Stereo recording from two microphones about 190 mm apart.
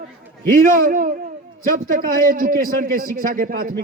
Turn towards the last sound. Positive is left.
turn(degrees=-50)  # may be behind; listen again after turning